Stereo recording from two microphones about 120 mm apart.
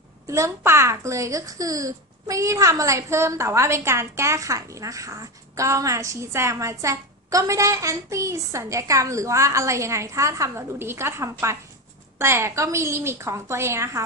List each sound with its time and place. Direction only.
0.3 s speech: 25° right (ahead or behind)